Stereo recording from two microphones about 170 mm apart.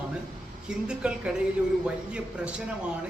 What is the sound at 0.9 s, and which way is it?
A man's voice, 5° right (ahead or behind).